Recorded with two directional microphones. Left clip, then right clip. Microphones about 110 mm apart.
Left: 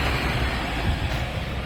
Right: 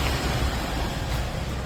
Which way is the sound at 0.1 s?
50° left (ahead or behind).